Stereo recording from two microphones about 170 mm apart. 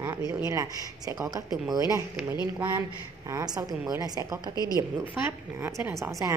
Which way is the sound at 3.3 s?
20° right (ahead or behind).